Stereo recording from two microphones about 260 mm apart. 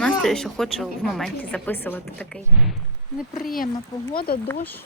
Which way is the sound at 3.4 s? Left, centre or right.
Left.